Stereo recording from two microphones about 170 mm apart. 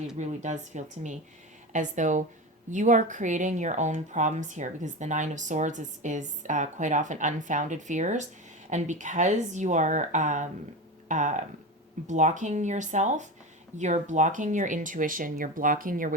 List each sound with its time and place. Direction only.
0.2 s speech: 45° right (ahead or behind)